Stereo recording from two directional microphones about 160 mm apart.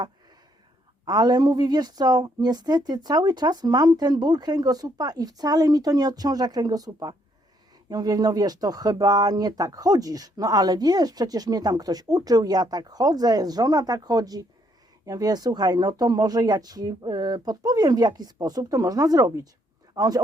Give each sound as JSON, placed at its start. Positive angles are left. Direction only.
{"t": 1.0, "sound": "speech", "side_deg": -25}